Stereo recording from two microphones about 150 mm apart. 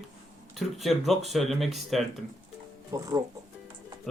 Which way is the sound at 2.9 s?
20° right (ahead or behind).